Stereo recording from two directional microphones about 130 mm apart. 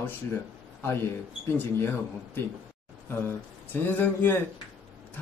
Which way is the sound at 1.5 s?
15° left (ahead or behind).